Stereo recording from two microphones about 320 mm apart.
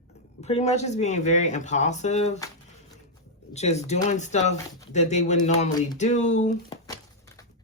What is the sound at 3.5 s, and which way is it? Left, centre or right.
Speech, left.